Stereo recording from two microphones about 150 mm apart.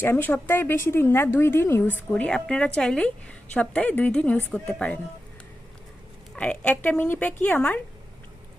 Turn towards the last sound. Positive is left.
turn(degrees=10)  # may be behind; listen again after turning